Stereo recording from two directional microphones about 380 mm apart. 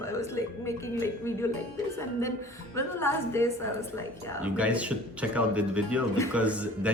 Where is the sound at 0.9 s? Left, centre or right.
Centre.